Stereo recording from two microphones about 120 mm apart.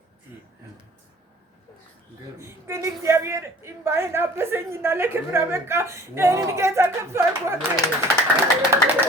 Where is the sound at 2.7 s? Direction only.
25° right (ahead or behind).